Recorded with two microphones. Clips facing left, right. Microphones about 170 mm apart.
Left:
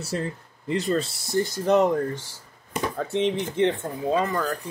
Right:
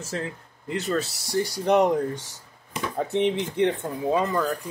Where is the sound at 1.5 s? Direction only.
15° right (ahead or behind).